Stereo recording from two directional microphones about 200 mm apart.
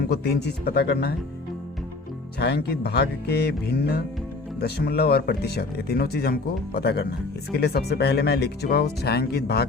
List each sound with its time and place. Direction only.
0.1 s speech: 55° left (ahead or behind)
2.4 s speech: 55° left (ahead or behind)